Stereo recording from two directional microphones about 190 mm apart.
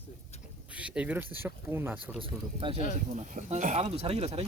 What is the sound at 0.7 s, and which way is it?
Speech, 5° right (ahead or behind).